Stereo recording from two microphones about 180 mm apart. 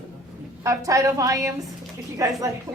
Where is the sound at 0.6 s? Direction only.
20° right (ahead or behind).